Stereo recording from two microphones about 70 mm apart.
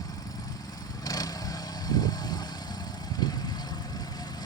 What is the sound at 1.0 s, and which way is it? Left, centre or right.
Vehicle, left.